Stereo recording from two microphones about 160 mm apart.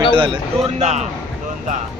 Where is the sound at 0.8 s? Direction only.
45° right (ahead or behind).